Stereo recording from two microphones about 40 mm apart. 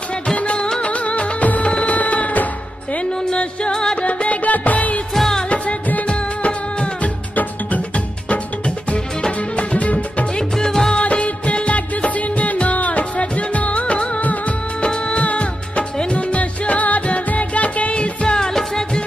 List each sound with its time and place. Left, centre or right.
0.4 s music: left
3.2 s music: left
4.0 s music: left
5.1 s music: centre
5.4 s music: left
6.0 s music: left
10.5 s music: centre
11.0 s music: left
14.8 s music of bollywood: left
18.5 s music: centre